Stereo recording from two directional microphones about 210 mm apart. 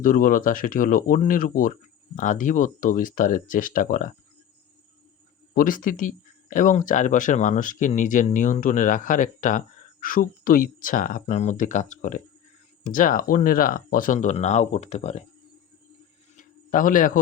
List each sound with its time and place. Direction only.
0.0 s speech: 40° left (ahead or behind)
5.5 s speech: 40° left (ahead or behind)
16.3 s a sound: 40° left (ahead or behind)